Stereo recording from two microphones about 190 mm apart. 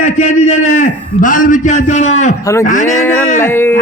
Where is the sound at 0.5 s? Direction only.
90° left.